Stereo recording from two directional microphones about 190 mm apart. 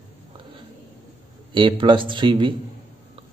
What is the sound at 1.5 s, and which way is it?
Speech, 25° right (ahead or behind).